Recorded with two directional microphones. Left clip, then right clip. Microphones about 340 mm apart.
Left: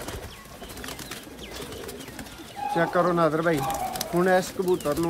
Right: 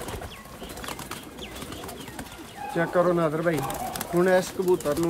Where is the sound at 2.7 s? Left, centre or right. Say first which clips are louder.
Even; centre.